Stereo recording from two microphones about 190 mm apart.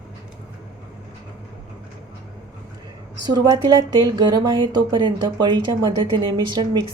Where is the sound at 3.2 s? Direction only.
20° right (ahead or behind).